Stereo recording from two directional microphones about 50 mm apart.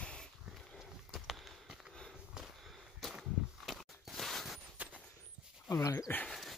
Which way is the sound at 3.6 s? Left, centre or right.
Centre.